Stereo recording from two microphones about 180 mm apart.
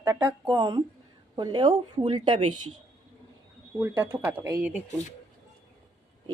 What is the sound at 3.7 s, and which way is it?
Speech, 10° right (ahead or behind).